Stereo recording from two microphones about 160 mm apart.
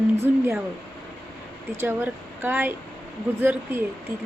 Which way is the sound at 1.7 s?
10° right (ahead or behind).